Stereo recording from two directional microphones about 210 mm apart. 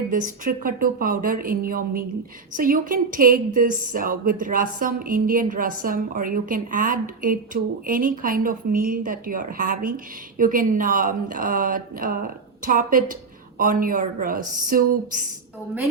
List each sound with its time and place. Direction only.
0.1 s a woman's voice: 40° right (ahead or behind)